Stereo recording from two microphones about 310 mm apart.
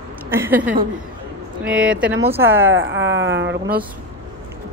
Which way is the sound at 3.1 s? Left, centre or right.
Right.